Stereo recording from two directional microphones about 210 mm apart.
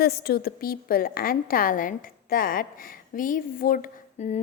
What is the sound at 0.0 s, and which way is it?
A woman's voice, 50° left (ahead or behind).